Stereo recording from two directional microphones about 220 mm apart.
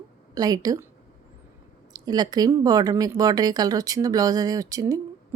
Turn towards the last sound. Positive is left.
turn(degrees=-15)  # may be behind; listen again after turning